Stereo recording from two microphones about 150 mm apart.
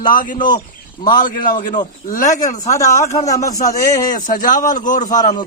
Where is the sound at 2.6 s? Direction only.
20° left (ahead or behind).